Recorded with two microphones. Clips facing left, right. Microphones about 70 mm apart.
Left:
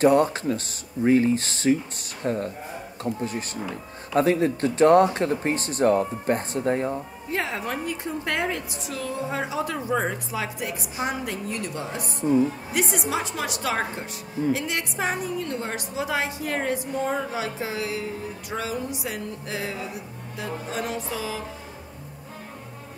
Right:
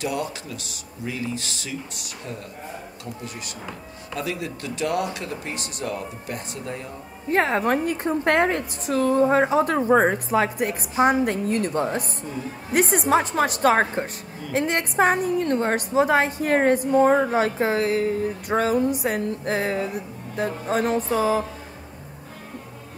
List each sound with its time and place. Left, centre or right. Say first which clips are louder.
0.0 s speech: left 9 dB; left
7.2 s a woman's voice: right 8 dB; right